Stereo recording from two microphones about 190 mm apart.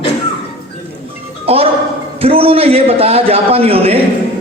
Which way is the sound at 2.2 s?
30° right (ahead or behind).